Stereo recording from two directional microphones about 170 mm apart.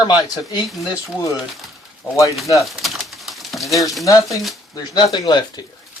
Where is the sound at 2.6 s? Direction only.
Centre (ahead or behind).